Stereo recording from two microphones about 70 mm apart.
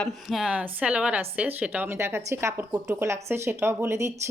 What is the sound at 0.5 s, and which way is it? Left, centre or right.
A woman's voice, centre.